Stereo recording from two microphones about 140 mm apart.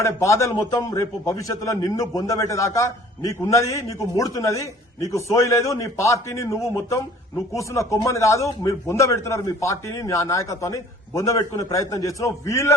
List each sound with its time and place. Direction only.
0.0 s a man's voice: 20° left (ahead or behind)